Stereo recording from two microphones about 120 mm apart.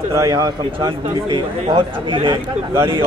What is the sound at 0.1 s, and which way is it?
A man's voice, 30° right (ahead or behind).